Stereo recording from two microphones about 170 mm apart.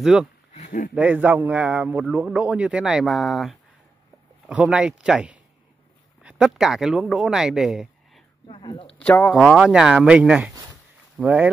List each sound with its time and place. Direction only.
0.0 s speech: centre (ahead or behind)
0.5 s a sound: 45° left (ahead or behind)
0.9 s a man's voice: 10° right (ahead or behind)
8.5 s speech: 30° left (ahead or behind)
9.0 s speech: 10° left (ahead or behind)
9.3 s a man's voice: 5° right (ahead or behind)